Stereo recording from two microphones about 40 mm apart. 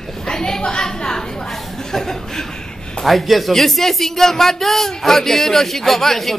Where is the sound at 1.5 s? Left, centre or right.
Centre.